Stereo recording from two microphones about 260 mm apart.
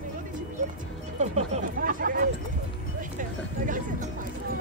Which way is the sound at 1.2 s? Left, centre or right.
Right.